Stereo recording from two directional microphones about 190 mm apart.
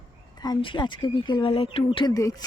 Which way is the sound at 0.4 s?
25° left (ahead or behind).